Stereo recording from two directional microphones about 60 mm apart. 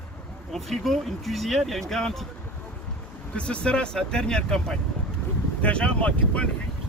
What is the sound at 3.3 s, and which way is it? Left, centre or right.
Speech, centre.